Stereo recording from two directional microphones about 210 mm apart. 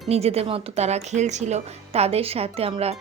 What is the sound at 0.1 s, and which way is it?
Speech, 30° right (ahead or behind).